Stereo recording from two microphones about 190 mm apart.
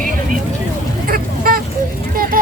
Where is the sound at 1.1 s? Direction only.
50° right (ahead or behind).